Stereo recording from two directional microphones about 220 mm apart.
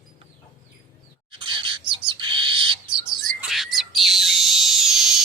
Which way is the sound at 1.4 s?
20° right (ahead or behind).